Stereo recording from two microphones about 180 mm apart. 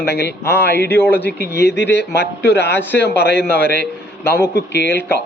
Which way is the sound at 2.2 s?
65° left (ahead or behind).